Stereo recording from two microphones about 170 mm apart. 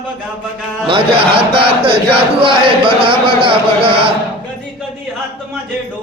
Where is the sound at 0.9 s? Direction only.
30° right (ahead or behind).